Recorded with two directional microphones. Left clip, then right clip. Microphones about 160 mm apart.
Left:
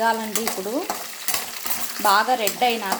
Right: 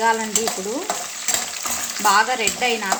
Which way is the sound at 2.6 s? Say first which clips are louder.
Even; 20° left (ahead or behind).